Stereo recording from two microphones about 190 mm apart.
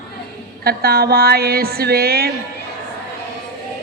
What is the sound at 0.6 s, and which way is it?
Speech, 55° right (ahead or behind).